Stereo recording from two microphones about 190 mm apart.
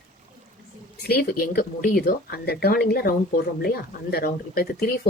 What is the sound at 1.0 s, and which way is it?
Speech, 55° left (ahead or behind).